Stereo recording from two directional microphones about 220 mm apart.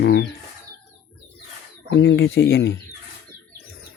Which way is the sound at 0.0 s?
45° left (ahead or behind).